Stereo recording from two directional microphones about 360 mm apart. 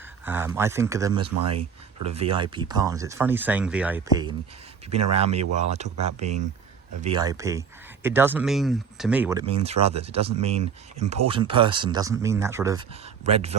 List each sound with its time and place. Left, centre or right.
0.3 s speech: centre